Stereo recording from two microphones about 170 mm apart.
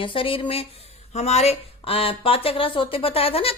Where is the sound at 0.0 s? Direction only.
30° left (ahead or behind).